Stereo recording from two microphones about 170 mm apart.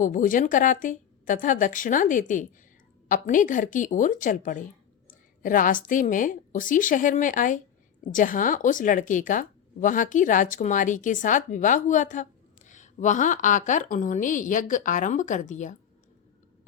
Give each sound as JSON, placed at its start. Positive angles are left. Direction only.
{"t": 0.0, "sound": "a woman's voice", "side_deg": 50}